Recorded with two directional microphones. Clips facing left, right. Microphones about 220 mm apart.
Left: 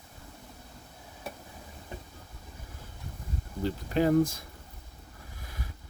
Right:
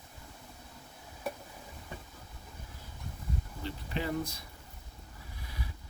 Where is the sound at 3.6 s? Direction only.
45° left (ahead or behind).